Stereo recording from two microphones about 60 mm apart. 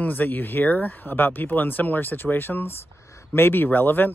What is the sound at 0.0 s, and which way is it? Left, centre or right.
Speech, left.